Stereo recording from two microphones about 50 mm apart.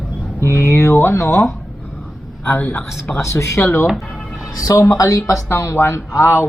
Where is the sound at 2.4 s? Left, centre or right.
Left.